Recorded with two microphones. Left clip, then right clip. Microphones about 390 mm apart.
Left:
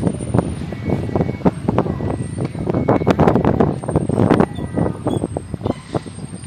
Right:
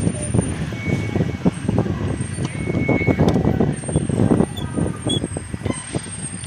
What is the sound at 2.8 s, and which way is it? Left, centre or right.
Vehicle, left.